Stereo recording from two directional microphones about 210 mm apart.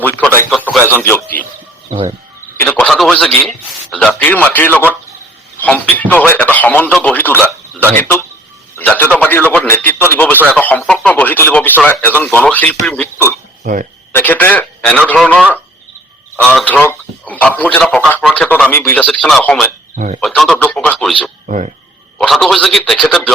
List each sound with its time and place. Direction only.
0.0 s radio: 10° left (ahead or behind)
0.9 s speech: 10° left (ahead or behind)
2.6 s a man's voice: 5° left (ahead or behind)
16.5 s a man's voice: 5° left (ahead or behind)
21.4 s speech: 35° right (ahead or behind)
22.2 s a man's voice: centre (ahead or behind)